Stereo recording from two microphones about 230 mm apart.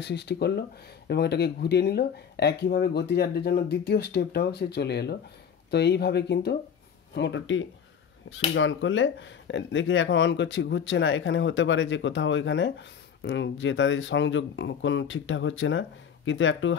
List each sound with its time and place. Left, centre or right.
0.0 s speech: left